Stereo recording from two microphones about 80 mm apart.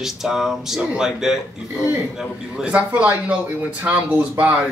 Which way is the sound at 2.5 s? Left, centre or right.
Centre.